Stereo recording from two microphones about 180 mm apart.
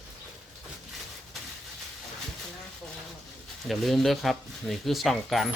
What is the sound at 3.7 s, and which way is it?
Speech, centre (ahead or behind).